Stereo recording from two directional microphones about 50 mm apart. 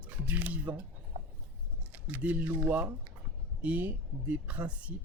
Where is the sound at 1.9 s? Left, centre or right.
Right.